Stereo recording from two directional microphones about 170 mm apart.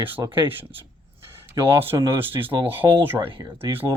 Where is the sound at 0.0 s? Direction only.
10° right (ahead or behind).